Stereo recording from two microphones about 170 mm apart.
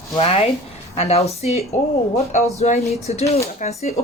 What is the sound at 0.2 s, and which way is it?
Speech, 35° left (ahead or behind).